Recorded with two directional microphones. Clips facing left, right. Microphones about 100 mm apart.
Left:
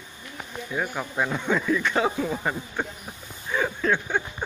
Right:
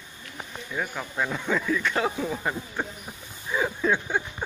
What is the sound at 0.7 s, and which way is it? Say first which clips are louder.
Speech: left 2 dB; 15° left (ahead or behind).